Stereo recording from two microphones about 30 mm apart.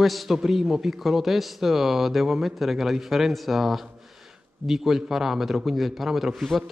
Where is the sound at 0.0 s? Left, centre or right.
Centre.